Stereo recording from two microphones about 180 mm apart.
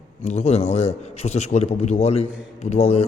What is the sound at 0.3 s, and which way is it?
A man's voice, 35° left (ahead or behind).